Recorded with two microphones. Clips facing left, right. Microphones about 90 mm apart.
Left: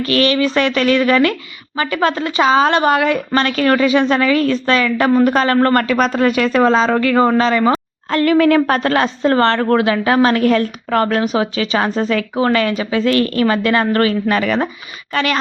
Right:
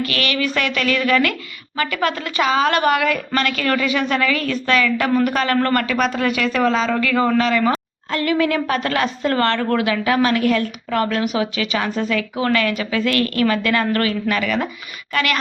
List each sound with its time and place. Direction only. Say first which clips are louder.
0.0 s a woman's voice: left 7 dB; 30° left (ahead or behind)
8.1 s a woman's voice: left 7 dB; 45° left (ahead or behind); by 15.4 s 30° left (ahead or behind)